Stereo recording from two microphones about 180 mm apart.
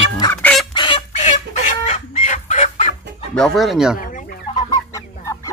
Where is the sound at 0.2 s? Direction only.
10° left (ahead or behind).